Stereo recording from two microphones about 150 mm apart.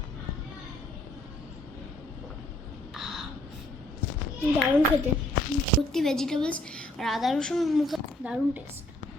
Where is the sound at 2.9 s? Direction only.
Centre (ahead or behind).